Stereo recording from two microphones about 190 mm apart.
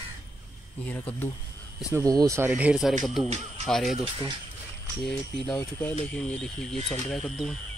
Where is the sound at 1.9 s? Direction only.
20° right (ahead or behind); by 4.0 s centre (ahead or behind).